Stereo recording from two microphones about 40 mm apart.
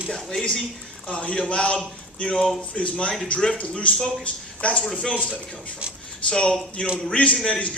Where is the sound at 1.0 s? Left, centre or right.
Left.